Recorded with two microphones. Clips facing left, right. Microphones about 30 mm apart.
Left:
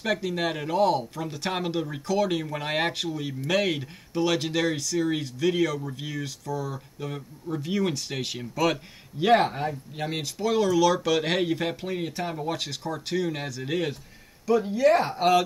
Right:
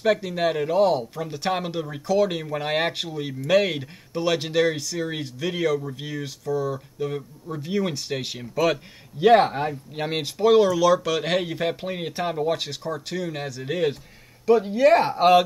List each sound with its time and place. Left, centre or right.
0.0 s speech: centre
6.7 s speech: centre
9.7 s speech: right
10.7 s speech: centre
12.9 s speech: centre
14.4 s speech: right